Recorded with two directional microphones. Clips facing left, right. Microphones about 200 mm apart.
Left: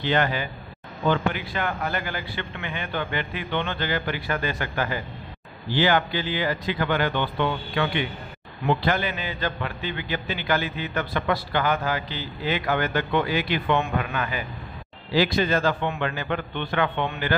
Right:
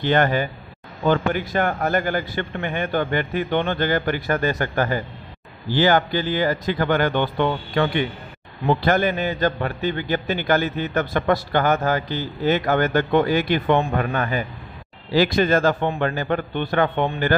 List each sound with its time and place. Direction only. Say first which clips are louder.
0.0 s a man's voice: right 5 dB; 50° right (ahead or behind)
13.7 s a man's voice: right 4 dB; 35° right (ahead or behind)